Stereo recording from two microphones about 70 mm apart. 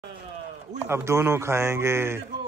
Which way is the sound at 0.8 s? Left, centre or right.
Right.